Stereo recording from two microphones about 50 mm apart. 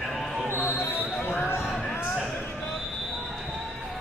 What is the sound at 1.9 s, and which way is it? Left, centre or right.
Music, left.